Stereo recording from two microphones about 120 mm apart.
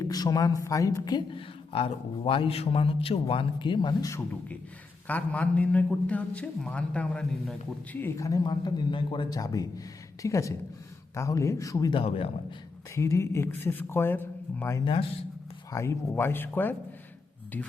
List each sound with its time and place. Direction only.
0.0 s speech: 30° left (ahead or behind)
1.4 s a man's voice: 50° left (ahead or behind)
5.0 s a man's voice: 15° left (ahead or behind)
8.0 s speech: 25° left (ahead or behind)
8.4 s a man's voice: 40° left (ahead or behind)
11.9 s a man's voice: 50° left (ahead or behind)
12.9 s speech: 25° left (ahead or behind)
14.8 s a man's voice: 45° left (ahead or behind)
15.7 s speech: 25° left (ahead or behind)